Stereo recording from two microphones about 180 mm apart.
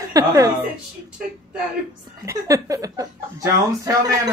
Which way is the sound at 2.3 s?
20° right (ahead or behind).